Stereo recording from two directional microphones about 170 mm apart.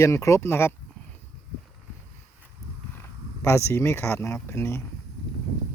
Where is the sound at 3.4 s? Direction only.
15° left (ahead or behind).